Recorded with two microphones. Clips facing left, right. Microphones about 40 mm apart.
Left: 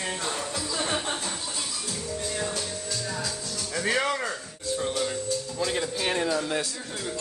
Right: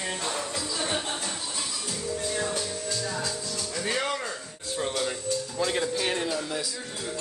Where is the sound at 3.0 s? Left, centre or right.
Centre.